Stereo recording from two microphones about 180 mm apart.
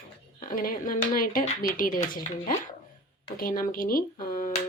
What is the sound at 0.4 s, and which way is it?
Speech, 50° left (ahead or behind).